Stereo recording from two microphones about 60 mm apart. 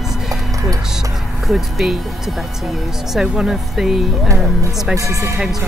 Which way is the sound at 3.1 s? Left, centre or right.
Centre.